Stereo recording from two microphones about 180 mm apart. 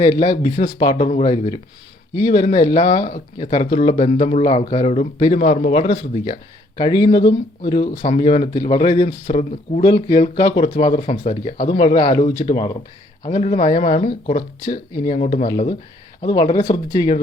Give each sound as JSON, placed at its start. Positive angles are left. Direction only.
{"t": 0.0, "sound": "speech", "side_deg": 25}
{"t": 9.8, "sound": "speech", "side_deg": 20}
{"t": 15.1, "sound": "speech", "side_deg": 40}
{"t": 15.4, "sound": "speech", "side_deg": 25}